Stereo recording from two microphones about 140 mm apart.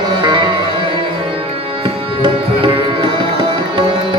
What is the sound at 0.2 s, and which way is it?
Music, 35° right (ahead or behind).